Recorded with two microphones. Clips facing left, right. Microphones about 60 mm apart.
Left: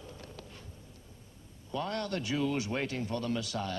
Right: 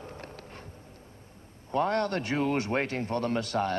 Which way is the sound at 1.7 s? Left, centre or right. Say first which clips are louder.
Right 7 dB; right.